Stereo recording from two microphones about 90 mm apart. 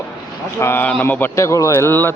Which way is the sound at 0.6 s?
25° left (ahead or behind).